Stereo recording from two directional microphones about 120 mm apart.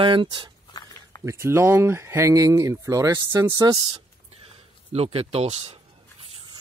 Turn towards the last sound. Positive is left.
turn(degrees=-60)  # may be behind; listen again after turning